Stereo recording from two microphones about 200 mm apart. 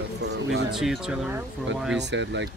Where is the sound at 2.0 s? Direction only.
60° right (ahead or behind).